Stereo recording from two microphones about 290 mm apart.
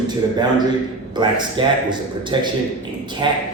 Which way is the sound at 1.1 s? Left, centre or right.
Centre.